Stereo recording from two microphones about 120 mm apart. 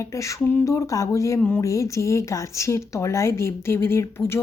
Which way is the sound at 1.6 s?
25° left (ahead or behind).